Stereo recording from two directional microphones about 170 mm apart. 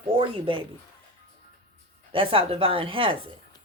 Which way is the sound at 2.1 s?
30° right (ahead or behind).